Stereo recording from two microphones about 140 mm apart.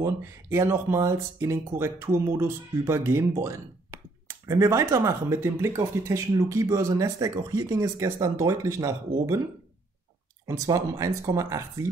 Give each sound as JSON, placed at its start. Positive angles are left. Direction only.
{"t": 0.0, "sound": "speech", "side_deg": -20}
{"t": 10.4, "sound": "speech", "side_deg": -20}